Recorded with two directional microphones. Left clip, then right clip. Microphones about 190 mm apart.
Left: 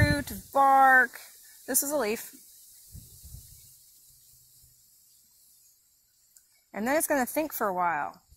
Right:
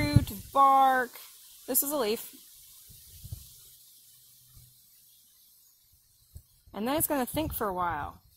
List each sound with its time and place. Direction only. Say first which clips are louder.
0.1 s a sound: left 1 dB; 30° left (ahead or behind)
1.7 s speech: left 1 dB; 25° left (ahead or behind)
6.7 s speech: left 4 dB; 30° left (ahead or behind)